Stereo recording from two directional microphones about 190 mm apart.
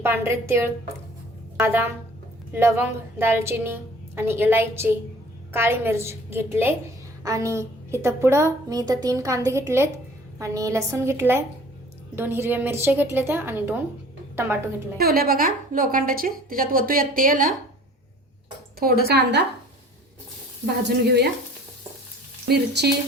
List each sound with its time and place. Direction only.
0.0 s a woman's voice: 10° right (ahead or behind)
14.9 s a woman's voice: 55° right (ahead or behind)
19.0 s speech: 60° right (ahead or behind)
22.4 s speech: 60° right (ahead or behind)